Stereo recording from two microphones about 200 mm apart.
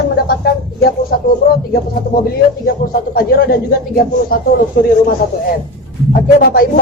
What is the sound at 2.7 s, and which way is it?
Speech, 50° left (ahead or behind).